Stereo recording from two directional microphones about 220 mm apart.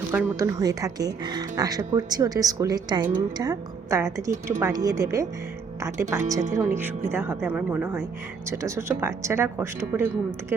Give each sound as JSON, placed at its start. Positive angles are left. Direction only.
{"t": 0.1, "sound": "a woman's voice", "side_deg": -10}